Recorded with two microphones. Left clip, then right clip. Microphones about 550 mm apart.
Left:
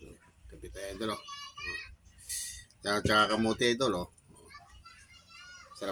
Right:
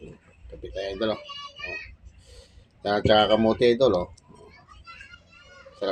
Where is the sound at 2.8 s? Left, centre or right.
Left.